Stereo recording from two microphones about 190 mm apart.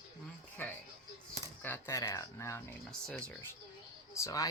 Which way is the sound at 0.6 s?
10° left (ahead or behind).